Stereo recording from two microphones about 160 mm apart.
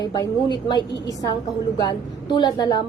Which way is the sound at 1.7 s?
25° left (ahead or behind).